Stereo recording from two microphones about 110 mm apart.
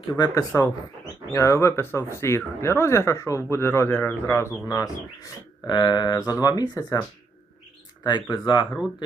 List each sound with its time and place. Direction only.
0.1 s speech: 35° left (ahead or behind)
8.3 s speech: 45° left (ahead or behind)